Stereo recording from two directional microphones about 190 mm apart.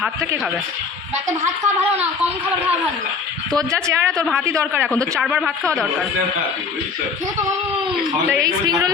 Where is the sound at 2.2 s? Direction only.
10° right (ahead or behind).